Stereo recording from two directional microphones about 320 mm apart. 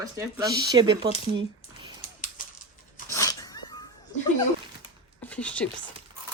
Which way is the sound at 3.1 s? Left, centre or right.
Centre.